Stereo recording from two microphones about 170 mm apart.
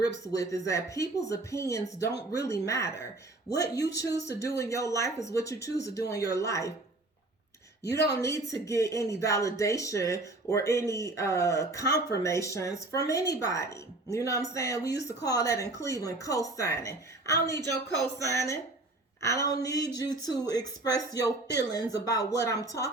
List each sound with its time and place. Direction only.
0.3 s speech: 20° left (ahead or behind)
8.2 s speech: 20° left (ahead or behind)